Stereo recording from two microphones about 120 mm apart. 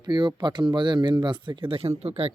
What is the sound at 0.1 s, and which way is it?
Speech, 40° right (ahead or behind).